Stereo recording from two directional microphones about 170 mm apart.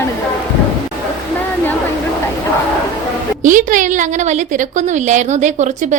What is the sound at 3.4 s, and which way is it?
A woman's voice, 50° right (ahead or behind).